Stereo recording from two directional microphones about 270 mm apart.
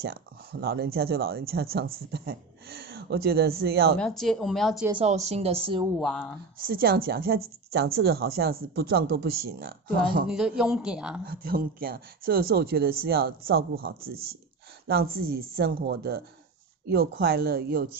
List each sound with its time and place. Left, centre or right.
0.0 s speech: right
4.0 s speech: centre
4.8 s speech: right
5.9 s speech: centre
6.6 s speech: right
10.2 s speech: centre
11.2 s speech: right